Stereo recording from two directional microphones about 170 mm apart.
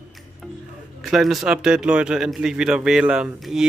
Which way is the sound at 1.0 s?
Centre (ahead or behind).